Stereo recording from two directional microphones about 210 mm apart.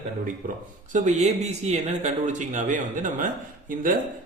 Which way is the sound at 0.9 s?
35° right (ahead or behind).